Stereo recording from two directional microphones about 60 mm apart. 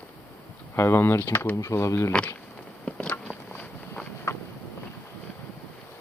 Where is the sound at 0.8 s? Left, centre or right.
Left.